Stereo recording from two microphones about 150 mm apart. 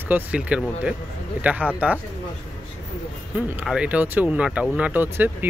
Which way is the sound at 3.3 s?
10° right (ahead or behind).